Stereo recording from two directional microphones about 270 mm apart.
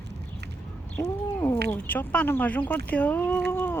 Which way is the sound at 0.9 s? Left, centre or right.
Centre.